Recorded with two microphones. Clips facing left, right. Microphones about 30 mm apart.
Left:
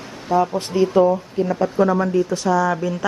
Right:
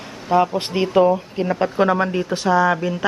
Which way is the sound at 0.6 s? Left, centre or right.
Right.